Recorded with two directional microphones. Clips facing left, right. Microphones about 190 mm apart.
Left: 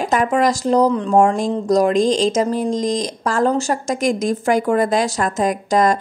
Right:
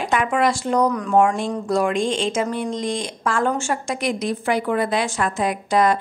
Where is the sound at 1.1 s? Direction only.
40° left (ahead or behind).